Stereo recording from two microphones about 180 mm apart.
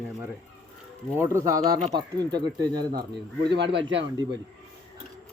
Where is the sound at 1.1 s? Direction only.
15° right (ahead or behind).